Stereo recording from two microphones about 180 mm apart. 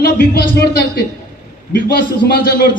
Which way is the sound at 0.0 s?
60° left (ahead or behind).